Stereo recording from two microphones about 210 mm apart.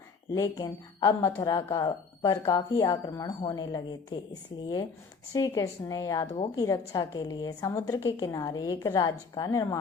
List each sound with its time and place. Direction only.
0.3 s a woman's voice: 15° left (ahead or behind)
5.3 s a woman's voice: 15° left (ahead or behind)